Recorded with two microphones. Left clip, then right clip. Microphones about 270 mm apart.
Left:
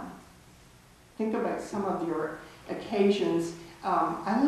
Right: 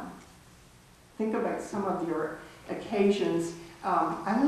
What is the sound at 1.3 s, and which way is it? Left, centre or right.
Speech, centre.